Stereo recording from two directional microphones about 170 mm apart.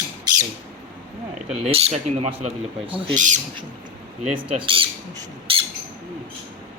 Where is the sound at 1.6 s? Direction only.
35° right (ahead or behind).